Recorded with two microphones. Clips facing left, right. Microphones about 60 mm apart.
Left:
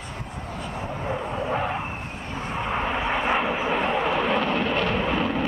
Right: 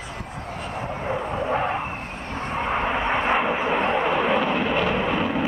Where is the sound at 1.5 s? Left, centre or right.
Centre.